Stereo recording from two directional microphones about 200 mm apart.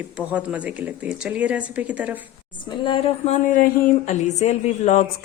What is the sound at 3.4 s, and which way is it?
Speech, 40° left (ahead or behind).